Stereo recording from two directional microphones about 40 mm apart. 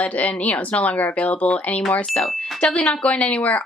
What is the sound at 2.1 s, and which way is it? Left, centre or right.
Speech, centre.